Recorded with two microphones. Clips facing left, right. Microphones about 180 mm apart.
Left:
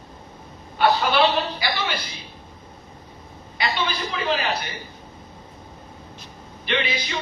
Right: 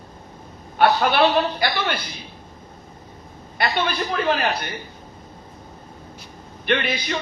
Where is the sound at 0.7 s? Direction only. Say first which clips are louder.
Right 2 dB; 55° right (ahead or behind).